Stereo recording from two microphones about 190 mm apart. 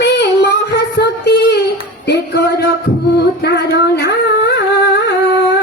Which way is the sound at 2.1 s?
60° left (ahead or behind).